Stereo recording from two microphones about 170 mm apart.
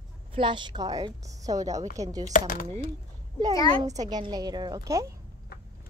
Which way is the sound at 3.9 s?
25° right (ahead or behind).